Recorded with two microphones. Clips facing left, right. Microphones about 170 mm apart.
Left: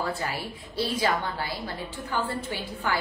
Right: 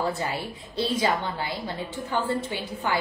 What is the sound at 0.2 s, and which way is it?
A woman's voice, 25° right (ahead or behind).